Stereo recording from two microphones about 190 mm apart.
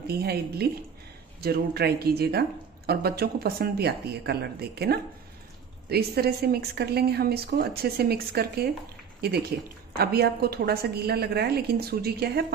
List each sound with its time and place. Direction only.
0.0 s speech: 55° right (ahead or behind)